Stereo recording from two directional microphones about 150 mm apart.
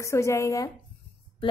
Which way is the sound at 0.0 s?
20° left (ahead or behind).